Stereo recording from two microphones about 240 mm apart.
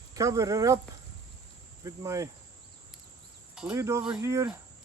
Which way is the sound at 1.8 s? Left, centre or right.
Centre.